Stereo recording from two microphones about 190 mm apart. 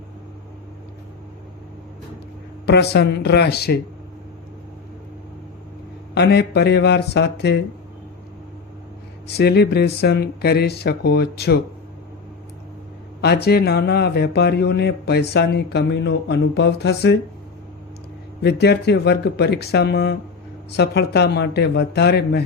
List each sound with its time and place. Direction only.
2.6 s speech: 60° left (ahead or behind)
6.1 s speech: 60° left (ahead or behind)
9.2 s speech: 60° left (ahead or behind)
13.2 s speech: 60° left (ahead or behind)
18.4 s speech: 60° left (ahead or behind)